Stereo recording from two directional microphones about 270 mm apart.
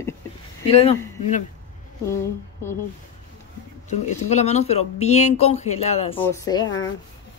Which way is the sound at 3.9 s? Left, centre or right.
Left.